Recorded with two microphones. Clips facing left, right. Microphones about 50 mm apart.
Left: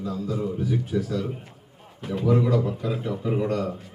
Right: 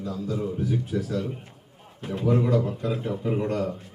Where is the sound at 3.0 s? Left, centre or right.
Right.